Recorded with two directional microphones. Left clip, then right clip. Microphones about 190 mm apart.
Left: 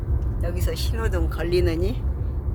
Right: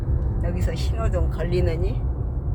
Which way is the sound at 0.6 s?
35° left (ahead or behind).